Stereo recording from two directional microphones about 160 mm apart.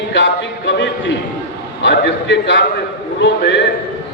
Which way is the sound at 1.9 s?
90° left.